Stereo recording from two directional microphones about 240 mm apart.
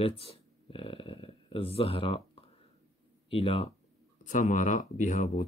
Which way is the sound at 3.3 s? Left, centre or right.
Left.